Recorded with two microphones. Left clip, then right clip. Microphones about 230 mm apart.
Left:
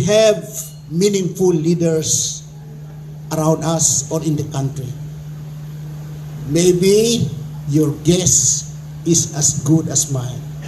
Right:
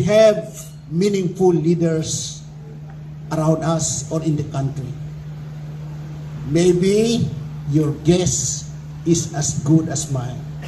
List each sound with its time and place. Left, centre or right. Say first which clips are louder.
0.0 s a man's voice: even; left
6.5 s a man's voice: left 3 dB; left